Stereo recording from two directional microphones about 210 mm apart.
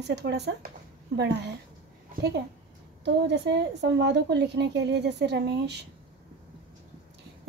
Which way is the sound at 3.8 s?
55° right (ahead or behind).